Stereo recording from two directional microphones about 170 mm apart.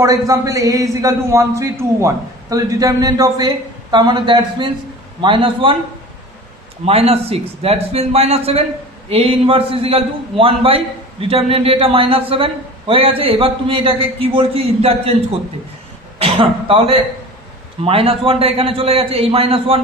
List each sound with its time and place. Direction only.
0.0 s a man's voice: 20° right (ahead or behind)
6.9 s a man's voice: 35° right (ahead or behind)
16.2 s a man's voice: 30° right (ahead or behind)